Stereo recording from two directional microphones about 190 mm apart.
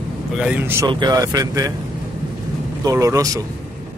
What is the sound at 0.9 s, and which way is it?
Speech, 20° right (ahead or behind).